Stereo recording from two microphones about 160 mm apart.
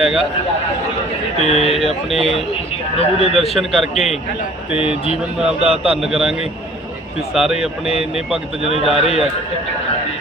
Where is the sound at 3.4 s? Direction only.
Centre (ahead or behind).